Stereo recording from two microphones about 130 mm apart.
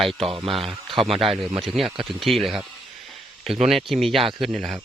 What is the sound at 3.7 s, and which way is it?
Speech, centre (ahead or behind).